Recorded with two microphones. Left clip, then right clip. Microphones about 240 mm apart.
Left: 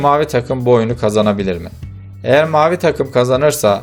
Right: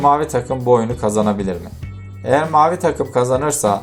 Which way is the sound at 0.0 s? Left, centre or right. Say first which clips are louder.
Left 2 dB; left.